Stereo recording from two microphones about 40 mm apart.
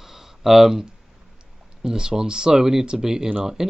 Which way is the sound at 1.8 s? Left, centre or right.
Centre.